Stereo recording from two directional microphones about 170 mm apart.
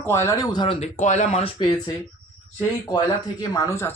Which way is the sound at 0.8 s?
45° left (ahead or behind).